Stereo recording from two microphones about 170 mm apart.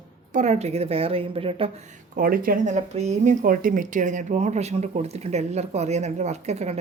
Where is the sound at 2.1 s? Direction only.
55° right (ahead or behind).